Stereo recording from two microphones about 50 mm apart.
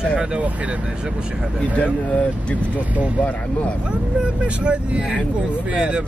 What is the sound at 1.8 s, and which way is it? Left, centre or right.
Speech, left.